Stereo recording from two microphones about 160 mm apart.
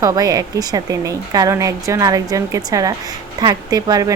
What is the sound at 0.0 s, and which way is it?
Speech, 20° right (ahead or behind).